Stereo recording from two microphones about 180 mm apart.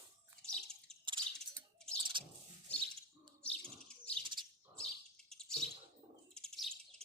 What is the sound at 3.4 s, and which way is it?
Bird, 5° left (ahead or behind).